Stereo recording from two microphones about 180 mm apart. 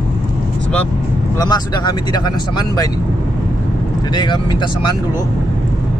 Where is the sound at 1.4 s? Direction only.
20° left (ahead or behind).